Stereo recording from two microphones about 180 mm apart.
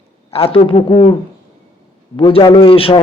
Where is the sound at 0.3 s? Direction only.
30° left (ahead or behind).